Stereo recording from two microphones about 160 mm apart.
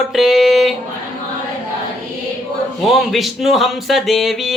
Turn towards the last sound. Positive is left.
turn(degrees=0)  # may be behind; listen again after turning